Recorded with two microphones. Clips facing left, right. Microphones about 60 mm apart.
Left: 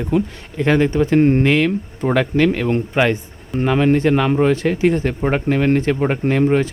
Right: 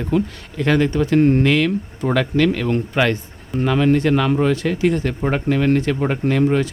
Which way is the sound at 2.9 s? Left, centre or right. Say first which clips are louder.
Left 2 dB; centre.